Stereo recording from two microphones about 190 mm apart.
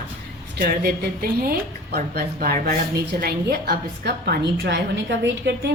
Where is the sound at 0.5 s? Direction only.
55° right (ahead or behind).